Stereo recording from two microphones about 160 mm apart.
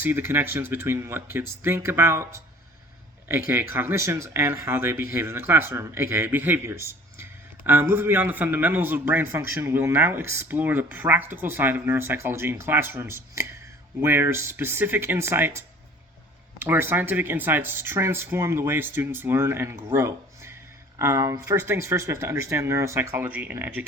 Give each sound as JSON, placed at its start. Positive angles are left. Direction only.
{"t": 0.0, "sound": "speech", "side_deg": -15}